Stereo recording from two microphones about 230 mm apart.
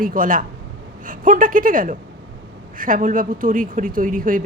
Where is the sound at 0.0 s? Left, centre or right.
Right.